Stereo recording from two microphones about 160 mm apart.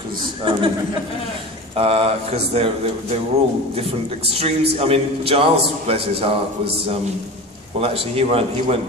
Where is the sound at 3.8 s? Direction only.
40° right (ahead or behind).